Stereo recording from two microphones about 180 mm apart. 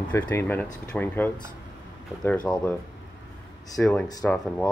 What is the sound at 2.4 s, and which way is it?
Speech, 5° left (ahead or behind).